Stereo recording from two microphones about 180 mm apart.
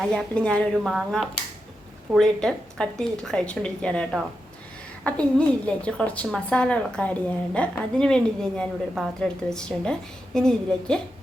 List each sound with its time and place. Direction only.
0.0 s a woman's voice: 5° left (ahead or behind)